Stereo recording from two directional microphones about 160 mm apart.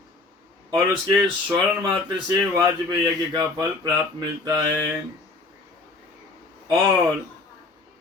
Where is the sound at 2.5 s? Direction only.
25° right (ahead or behind).